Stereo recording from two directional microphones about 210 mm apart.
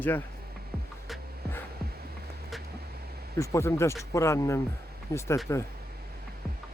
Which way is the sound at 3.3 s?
15° left (ahead or behind).